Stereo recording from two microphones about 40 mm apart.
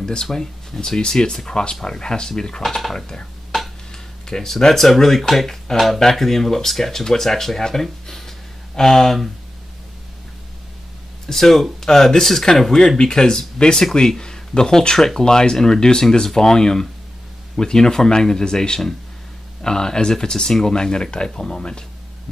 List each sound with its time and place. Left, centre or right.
0.0 s speech: centre
3.9 s speech: centre
11.2 s speech: centre